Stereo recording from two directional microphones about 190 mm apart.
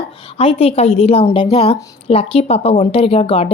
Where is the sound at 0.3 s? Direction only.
30° left (ahead or behind).